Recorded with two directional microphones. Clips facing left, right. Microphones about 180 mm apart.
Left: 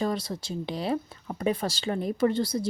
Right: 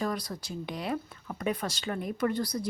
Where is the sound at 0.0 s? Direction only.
25° left (ahead or behind).